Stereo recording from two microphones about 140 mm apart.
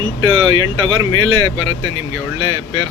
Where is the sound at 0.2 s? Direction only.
30° right (ahead or behind).